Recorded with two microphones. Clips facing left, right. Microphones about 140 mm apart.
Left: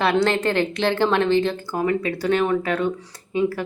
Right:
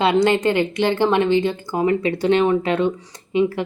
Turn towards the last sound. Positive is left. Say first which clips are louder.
# right 3 dB
turn(degrees=-20)  # may be behind; listen again after turning